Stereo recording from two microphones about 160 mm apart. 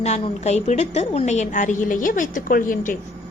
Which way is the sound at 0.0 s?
45° left (ahead or behind).